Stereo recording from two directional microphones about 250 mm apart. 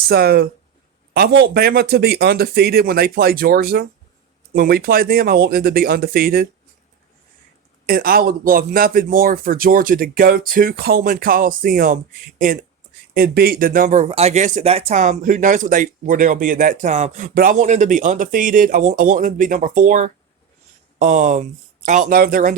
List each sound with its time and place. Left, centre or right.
0.1 s speech: right
7.9 s speech: right